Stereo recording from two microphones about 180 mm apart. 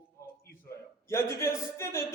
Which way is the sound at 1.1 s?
15° left (ahead or behind).